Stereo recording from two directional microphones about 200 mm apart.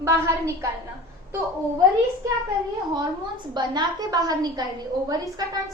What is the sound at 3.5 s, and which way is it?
A woman's voice, 20° right (ahead or behind).